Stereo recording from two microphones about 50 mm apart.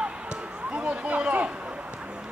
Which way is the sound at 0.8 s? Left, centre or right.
Right.